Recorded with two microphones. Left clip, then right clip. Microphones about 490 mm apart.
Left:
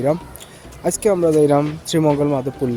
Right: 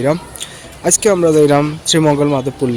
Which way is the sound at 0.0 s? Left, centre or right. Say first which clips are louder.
Right 3 dB; left.